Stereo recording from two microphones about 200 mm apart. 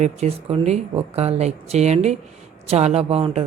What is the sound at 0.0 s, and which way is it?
A woman's voice, 30° right (ahead or behind).